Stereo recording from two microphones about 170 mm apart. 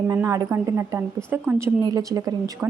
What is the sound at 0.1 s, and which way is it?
A woman's voice, 20° right (ahead or behind).